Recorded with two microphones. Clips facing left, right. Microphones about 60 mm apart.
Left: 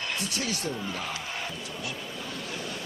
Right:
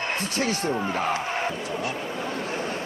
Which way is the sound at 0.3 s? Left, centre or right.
Right.